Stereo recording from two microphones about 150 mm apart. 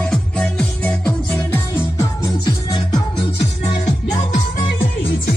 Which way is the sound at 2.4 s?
30° left (ahead or behind).